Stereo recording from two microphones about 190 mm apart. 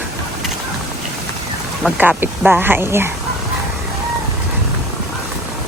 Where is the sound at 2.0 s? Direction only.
10° right (ahead or behind).